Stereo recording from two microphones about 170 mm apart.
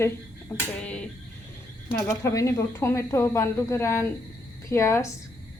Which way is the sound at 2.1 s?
20° left (ahead or behind).